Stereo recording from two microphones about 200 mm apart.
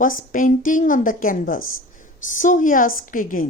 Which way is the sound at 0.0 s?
45° left (ahead or behind).